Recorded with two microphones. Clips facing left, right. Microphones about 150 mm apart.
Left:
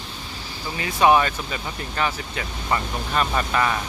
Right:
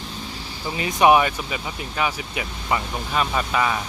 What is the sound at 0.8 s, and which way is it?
Speech, 20° right (ahead or behind).